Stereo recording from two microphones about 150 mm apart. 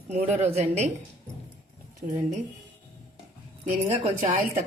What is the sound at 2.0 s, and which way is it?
Speech, 65° right (ahead or behind).